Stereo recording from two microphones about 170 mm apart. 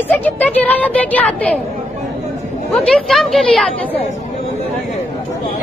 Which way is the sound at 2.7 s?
Centre (ahead or behind).